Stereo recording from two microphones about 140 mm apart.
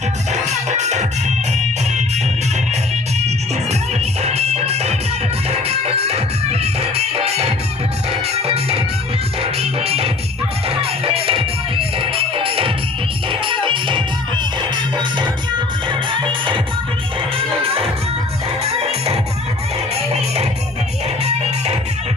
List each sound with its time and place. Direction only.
0.3 s music: 55° right (ahead or behind)
4.2 s music: 50° right (ahead or behind)
18.6 s music: 50° right (ahead or behind)